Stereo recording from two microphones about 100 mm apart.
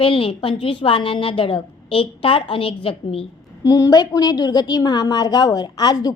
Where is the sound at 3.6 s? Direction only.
35° left (ahead or behind).